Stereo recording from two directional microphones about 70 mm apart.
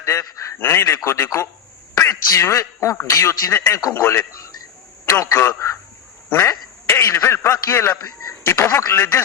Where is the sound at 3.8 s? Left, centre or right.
Left.